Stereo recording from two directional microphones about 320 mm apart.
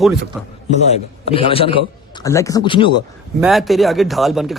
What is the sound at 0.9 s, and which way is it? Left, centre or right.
Speech, centre.